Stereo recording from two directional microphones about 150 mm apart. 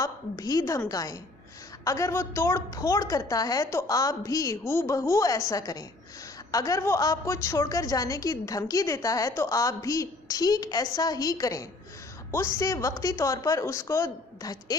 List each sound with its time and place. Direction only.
0.0 s a woman's voice: 25° left (ahead or behind)